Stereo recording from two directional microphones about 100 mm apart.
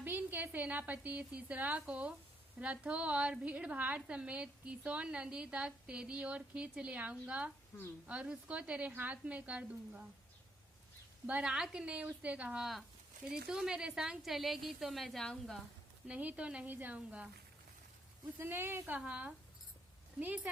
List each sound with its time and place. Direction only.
0.0 s a woman's voice: 20° right (ahead or behind)
11.3 s a woman's voice: 10° right (ahead or behind)
16.0 s a woman's voice: 10° right (ahead or behind)
18.3 s speech: 25° right (ahead or behind)
18.9 s a woman's voice: 10° right (ahead or behind)